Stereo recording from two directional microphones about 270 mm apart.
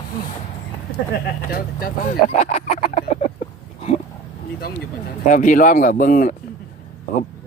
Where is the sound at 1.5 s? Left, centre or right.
Left.